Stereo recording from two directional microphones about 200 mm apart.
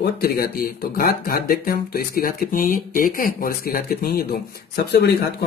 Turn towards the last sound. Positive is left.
turn(degrees=55)  # may be behind; listen again after turning